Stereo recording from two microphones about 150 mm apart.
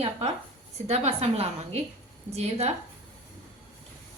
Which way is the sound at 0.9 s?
45° right (ahead or behind).